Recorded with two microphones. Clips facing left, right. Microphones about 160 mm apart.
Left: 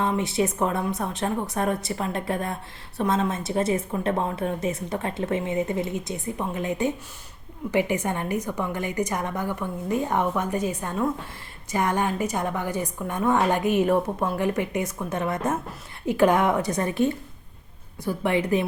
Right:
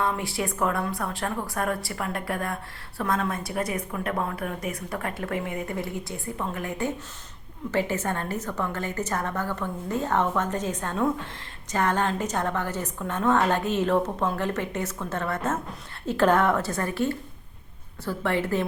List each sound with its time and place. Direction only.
0.0 s a woman's voice: 20° left (ahead or behind)